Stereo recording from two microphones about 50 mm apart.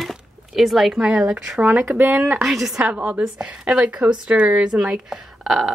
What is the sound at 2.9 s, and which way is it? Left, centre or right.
Speech, right.